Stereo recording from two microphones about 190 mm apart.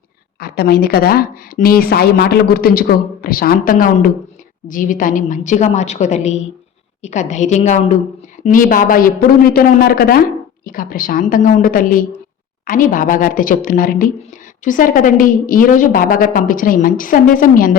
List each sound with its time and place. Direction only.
0.3 s a woman's voice: 55° left (ahead or behind)